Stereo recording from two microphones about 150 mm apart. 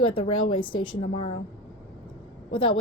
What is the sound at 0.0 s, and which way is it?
A woman's voice, 35° left (ahead or behind).